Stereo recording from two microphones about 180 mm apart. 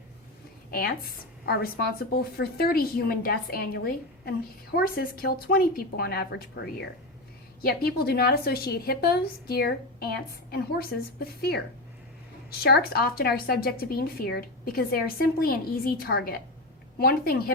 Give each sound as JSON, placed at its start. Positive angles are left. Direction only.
{"t": 0.7, "sound": "speech", "side_deg": 55}
{"t": 7.6, "sound": "speech", "side_deg": 55}